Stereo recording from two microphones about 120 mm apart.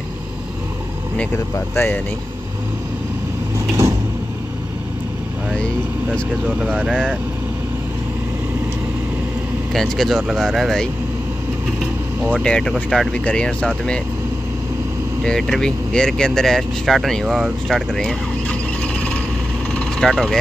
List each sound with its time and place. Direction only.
1.1 s speech: 20° left (ahead or behind)
3.5 s vehicle: 25° right (ahead or behind)
6.4 s speech: 10° right (ahead or behind)
9.7 s speech: centre (ahead or behind)
11.8 s vehicle: 10° right (ahead or behind)
12.4 s speech: 5° left (ahead or behind)
15.2 s speech: 5° left (ahead or behind)
19.7 s vehicle: 5° left (ahead or behind)